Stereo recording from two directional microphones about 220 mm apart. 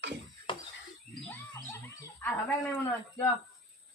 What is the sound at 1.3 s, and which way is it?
Speech, 10° left (ahead or behind).